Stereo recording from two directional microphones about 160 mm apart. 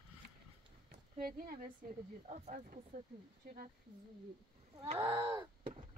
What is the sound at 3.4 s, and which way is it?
Speech, 75° right (ahead or behind).